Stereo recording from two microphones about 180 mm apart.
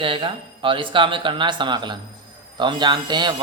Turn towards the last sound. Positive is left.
turn(degrees=-25)  # may be behind; listen again after turning